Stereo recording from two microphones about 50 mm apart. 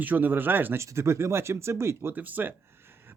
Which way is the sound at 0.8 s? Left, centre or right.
Right.